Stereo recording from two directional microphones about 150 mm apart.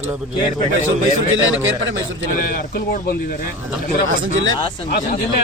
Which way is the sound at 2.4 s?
75° left (ahead or behind).